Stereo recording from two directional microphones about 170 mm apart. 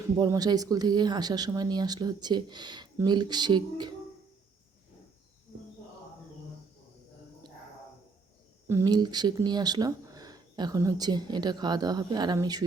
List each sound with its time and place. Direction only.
0.0 s speech: 20° right (ahead or behind)
8.6 s speech: 20° right (ahead or behind)